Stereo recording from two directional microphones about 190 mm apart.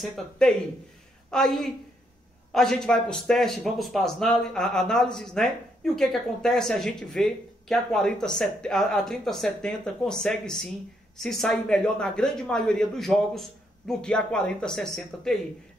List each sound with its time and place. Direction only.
0.0 s speech: 5° left (ahead or behind)